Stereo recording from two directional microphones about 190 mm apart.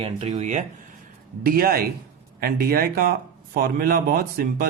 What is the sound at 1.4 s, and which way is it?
Speech, 50° right (ahead or behind).